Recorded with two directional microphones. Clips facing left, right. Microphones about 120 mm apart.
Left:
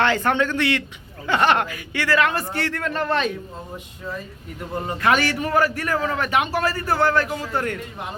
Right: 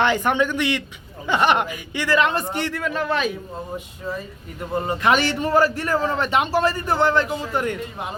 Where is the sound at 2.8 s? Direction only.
5° right (ahead or behind).